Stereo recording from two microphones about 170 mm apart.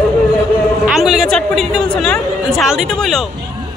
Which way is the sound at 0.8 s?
Centre (ahead or behind).